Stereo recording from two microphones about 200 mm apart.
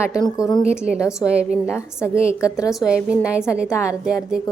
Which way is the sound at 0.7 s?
5° right (ahead or behind).